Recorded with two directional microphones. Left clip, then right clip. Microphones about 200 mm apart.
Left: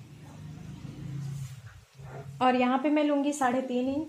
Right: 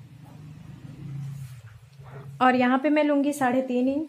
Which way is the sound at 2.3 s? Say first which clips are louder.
Right 4 dB; 25° right (ahead or behind).